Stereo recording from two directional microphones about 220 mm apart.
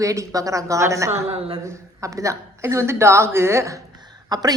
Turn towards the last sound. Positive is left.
turn(degrees=-15)  # may be behind; listen again after turning